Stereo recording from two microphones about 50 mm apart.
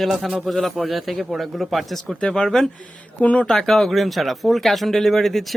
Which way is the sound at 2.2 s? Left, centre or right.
Centre.